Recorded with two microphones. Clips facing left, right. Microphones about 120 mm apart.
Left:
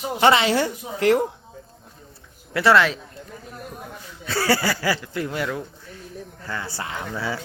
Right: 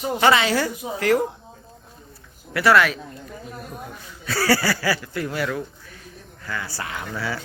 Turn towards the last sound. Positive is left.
turn(degrees=25)  # may be behind; listen again after turning